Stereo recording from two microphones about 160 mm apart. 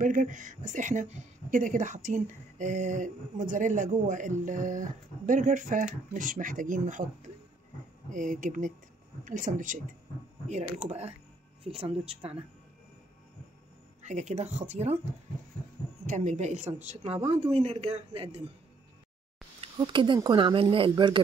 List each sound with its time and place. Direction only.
0.0 s a woman's voice: 55° right (ahead or behind)
10.8 s speech: 40° right (ahead or behind)
14.0 s a woman's voice: 45° right (ahead or behind)
16.1 s a woman's voice: 45° right (ahead or behind)
19.6 s speech: 30° right (ahead or behind)